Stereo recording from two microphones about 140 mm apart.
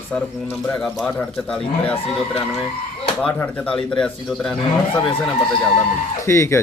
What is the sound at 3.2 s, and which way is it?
Speech, 10° left (ahead or behind).